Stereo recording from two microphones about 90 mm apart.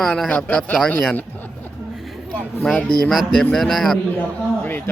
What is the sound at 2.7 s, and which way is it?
Speech, centre (ahead or behind).